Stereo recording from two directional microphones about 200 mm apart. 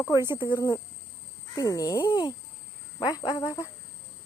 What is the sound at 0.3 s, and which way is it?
Speech, 20° left (ahead or behind).